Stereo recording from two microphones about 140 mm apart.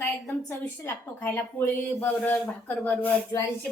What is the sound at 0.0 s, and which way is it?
A woman's voice, 15° left (ahead or behind).